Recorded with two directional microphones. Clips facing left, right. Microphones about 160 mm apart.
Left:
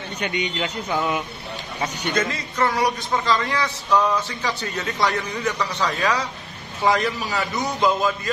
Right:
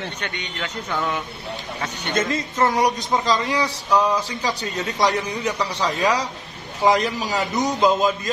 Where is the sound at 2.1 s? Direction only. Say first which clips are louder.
Right 4 dB; 20° right (ahead or behind).